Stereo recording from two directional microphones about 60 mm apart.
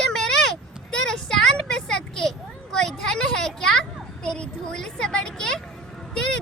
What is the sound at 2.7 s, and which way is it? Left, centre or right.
Speech, centre.